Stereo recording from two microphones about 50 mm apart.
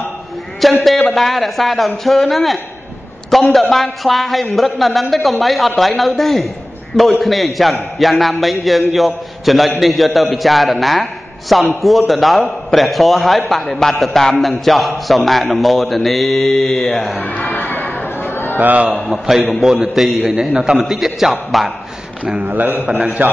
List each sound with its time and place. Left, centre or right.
0.8 s speech: centre
17.2 s a sound: left
18.6 s a man's voice: right
19.0 s speech: centre
22.4 s a man's voice: right